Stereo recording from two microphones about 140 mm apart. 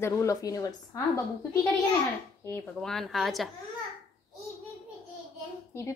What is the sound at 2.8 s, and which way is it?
Speech, centre (ahead or behind).